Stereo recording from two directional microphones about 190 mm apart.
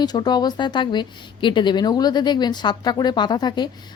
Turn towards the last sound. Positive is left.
turn(degrees=25)  # may be behind; listen again after turning